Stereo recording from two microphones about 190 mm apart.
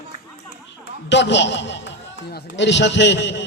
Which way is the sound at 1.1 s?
70° left (ahead or behind).